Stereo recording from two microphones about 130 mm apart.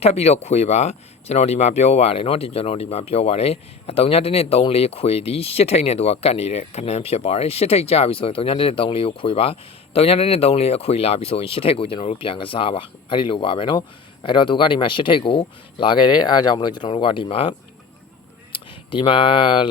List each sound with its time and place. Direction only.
0.0 s speech: 55° left (ahead or behind)
18.5 s speech: 40° left (ahead or behind)